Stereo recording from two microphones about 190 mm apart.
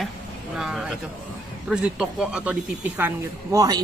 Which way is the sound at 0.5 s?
Centre (ahead or behind).